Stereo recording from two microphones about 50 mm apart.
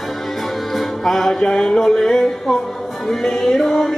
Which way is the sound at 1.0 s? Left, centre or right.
Centre.